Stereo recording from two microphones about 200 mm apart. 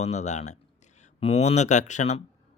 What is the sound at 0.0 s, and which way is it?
Speech, 35° left (ahead or behind).